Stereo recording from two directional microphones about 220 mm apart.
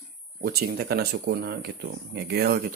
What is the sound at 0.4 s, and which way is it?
Speech, 45° right (ahead or behind).